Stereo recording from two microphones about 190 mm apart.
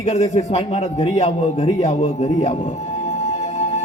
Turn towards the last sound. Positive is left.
turn(degrees=35)  # may be behind; listen again after turning